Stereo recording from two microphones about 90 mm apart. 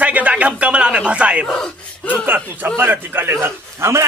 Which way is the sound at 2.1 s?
20° right (ahead or behind).